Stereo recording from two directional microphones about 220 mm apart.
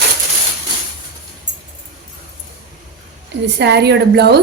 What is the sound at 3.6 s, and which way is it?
Speech, 50° right (ahead or behind).